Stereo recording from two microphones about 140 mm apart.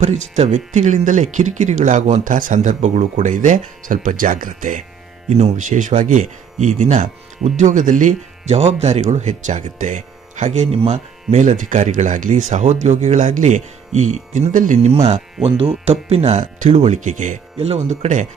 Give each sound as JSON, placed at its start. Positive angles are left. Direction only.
{"t": 0.0, "sound": "speech", "side_deg": -55}
{"t": 10.7, "sound": "speech", "side_deg": -45}
{"t": 15.4, "sound": "speech", "side_deg": -40}
{"t": 17.6, "sound": "speech", "side_deg": -50}